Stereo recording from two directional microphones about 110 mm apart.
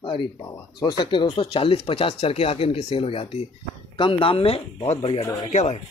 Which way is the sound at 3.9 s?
50° left (ahead or behind).